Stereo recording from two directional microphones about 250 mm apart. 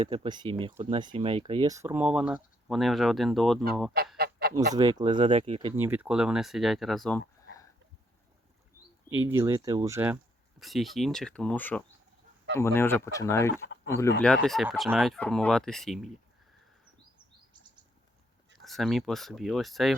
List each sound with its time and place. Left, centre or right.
0.0 s speech: right; by 3.6 s centre
4.2 s goose: right
4.7 s speech: centre
9.4 s speech: centre
14.4 s speech: centre
18.6 s speech: centre